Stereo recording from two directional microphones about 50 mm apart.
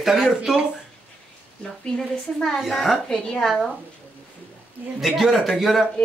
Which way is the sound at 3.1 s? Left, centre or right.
Centre.